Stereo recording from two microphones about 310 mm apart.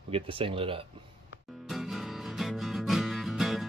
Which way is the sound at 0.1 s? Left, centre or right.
Centre.